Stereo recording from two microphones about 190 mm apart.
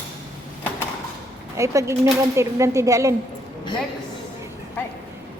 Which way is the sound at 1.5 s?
15° right (ahead or behind).